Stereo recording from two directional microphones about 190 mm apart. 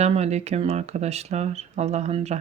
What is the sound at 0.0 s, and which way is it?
Speech, 35° right (ahead or behind).